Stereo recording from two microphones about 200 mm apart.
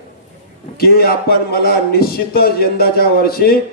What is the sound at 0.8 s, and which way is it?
A man's voice, 50° left (ahead or behind).